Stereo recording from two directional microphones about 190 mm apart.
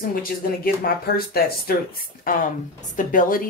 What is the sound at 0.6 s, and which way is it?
Speech, 50° left (ahead or behind).